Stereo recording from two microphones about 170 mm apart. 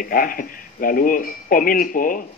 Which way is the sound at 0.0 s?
55° left (ahead or behind).